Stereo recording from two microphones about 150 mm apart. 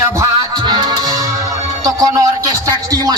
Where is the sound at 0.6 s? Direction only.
30° right (ahead or behind).